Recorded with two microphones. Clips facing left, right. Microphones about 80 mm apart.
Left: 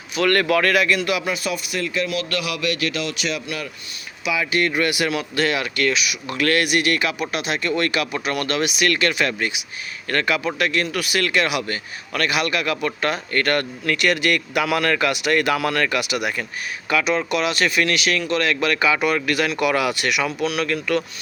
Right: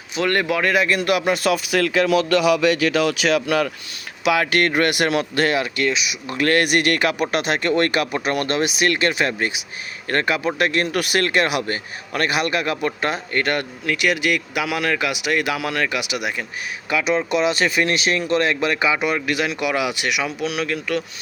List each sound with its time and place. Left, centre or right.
0.2 s speech: centre
0.9 s speech: right
1.7 s speech: right
3.2 s speech: right
4.2 s speech: right
5.5 s speech: right
6.3 s a man's voice: right
10.8 s speech: right
11.2 s a man's voice: right
13.3 s speech: centre